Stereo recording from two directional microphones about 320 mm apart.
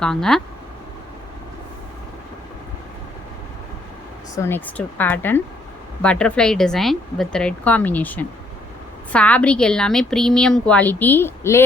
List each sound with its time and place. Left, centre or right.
0.0 s a woman's voice: centre
4.4 s a woman's voice: centre